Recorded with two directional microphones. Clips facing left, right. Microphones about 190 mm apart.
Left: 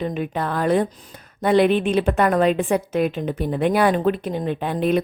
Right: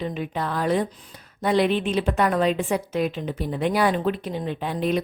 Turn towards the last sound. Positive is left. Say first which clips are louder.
# left 4 dB
turn(degrees=55)  # may be behind; listen again after turning